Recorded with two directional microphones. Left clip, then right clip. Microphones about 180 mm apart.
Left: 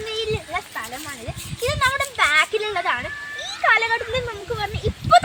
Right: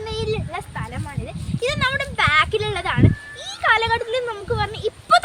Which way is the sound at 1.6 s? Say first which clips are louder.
Left 1 dB; 30° right (ahead or behind).